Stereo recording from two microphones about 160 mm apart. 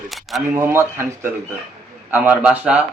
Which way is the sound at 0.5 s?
15° right (ahead or behind).